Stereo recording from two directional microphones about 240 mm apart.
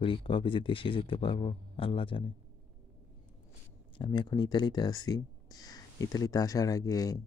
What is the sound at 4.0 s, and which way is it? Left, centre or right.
Speech, centre.